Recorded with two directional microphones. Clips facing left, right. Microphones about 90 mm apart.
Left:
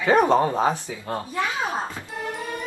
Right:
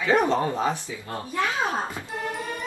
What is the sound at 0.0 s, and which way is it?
Speech, 50° left (ahead or behind).